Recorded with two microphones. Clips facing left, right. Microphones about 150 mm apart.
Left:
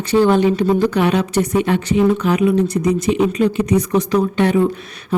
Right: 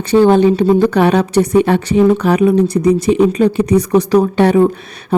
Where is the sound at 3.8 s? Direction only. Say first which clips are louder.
Right 5 dB; 65° right (ahead or behind).